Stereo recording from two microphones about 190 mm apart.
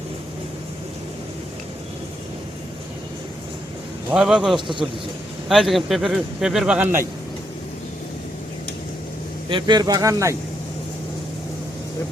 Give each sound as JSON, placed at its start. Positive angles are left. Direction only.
{"t": 4.1, "sound": "speech", "side_deg": -5}
{"t": 9.5, "sound": "speech", "side_deg": -25}